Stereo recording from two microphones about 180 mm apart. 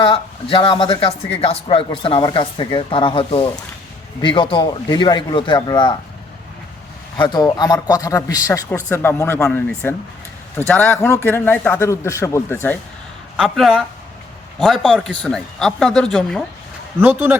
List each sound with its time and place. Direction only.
0.0 s speech: 30° left (ahead or behind)
7.2 s a man's voice: 25° left (ahead or behind)
13.3 s speech: centre (ahead or behind)
17.0 s a man's voice: 10° right (ahead or behind)